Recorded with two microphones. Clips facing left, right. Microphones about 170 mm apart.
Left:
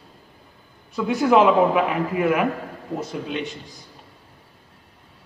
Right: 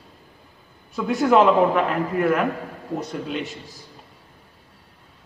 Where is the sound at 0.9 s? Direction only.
Centre (ahead or behind).